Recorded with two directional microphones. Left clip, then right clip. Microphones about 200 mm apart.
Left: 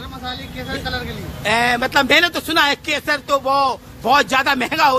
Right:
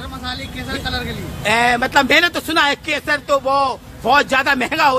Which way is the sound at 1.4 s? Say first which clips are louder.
Right 2 dB; 5° left (ahead or behind).